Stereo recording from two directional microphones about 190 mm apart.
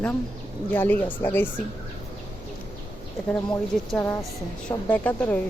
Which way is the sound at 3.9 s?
15° left (ahead or behind).